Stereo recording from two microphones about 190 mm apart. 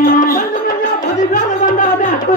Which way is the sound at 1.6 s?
45° left (ahead or behind).